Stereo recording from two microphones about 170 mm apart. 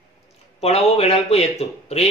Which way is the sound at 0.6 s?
40° left (ahead or behind).